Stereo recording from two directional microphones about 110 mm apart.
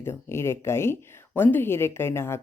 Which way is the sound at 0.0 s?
20° left (ahead or behind).